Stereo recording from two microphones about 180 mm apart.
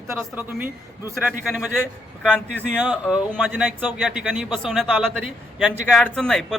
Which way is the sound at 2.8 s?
5° right (ahead or behind).